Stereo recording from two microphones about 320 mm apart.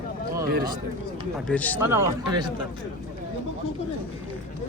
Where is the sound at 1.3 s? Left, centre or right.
Centre.